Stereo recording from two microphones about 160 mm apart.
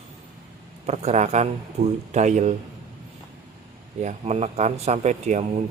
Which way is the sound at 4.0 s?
45° right (ahead or behind).